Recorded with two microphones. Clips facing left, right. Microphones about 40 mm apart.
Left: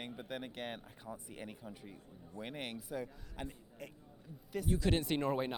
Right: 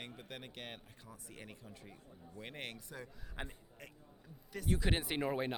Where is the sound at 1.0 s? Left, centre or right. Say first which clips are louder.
Left 6 dB; centre.